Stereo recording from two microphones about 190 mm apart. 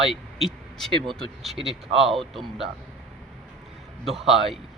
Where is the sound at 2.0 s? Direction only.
Centre (ahead or behind).